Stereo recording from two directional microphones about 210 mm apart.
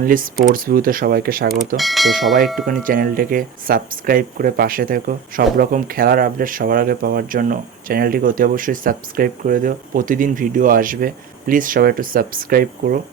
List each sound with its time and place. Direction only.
0.0 s speech: 40° right (ahead or behind)
1.5 s mechanisms: centre (ahead or behind)
2.6 s speech: 40° right (ahead or behind)